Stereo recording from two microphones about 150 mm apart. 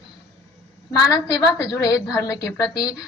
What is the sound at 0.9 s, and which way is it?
A woman's voice, 25° left (ahead or behind).